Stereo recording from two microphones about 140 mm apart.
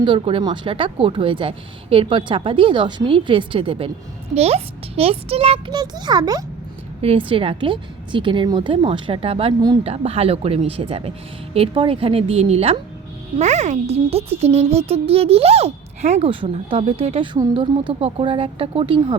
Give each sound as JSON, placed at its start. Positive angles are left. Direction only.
{"t": 0.0, "sound": "a child's voice", "side_deg": -35}
{"t": 5.7, "sound": "a child's voice", "side_deg": -30}
{"t": 7.0, "sound": "a child's voice", "side_deg": -40}